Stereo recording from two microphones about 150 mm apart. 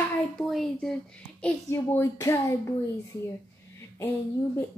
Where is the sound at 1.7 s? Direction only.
15° left (ahead or behind).